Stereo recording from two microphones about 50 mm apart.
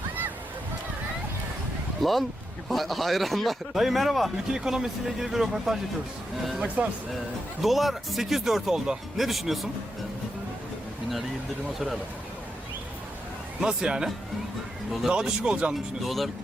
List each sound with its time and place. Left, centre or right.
2.0 s speech: centre
4.5 s speech: centre
6.8 s speech: right
7.6 s speech: centre
8.7 s speech: centre
9.2 s speech: centre
11.7 s speech: centre
13.6 s speech: centre
15.1 s speech: centre
16.0 s speech: centre